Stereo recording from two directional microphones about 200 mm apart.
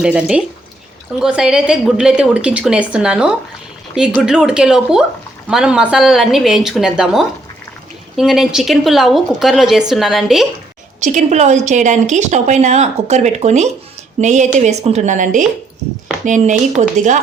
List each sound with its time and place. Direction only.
0.0 s a woman's voice: 5° right (ahead or behind)
11.0 s speech: 35° right (ahead or behind)